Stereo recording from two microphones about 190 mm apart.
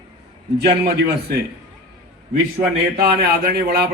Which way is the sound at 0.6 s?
55° right (ahead or behind).